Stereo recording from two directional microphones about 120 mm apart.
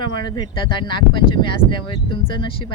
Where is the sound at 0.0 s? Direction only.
40° left (ahead or behind).